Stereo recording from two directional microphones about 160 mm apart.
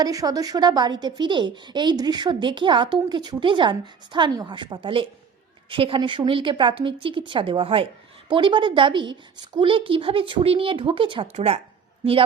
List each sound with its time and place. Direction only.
0.0 s a woman's voice: 25° right (ahead or behind); by 11.6 s 40° right (ahead or behind)